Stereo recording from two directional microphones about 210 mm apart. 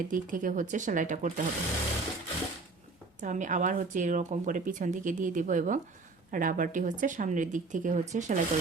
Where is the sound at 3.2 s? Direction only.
35° right (ahead or behind).